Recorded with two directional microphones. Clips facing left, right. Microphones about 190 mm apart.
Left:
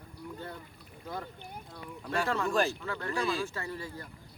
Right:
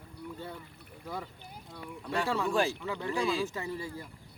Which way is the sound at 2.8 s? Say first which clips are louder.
Right 1 dB; 15° right (ahead or behind).